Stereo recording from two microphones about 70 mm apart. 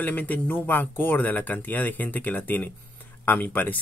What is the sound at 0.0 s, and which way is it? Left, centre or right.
Speech, left.